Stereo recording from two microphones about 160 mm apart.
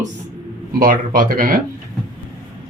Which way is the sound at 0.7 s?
60° right (ahead or behind).